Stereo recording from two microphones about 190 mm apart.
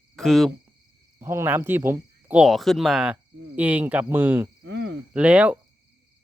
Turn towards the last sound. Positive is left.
turn(degrees=-5)  # may be behind; listen again after turning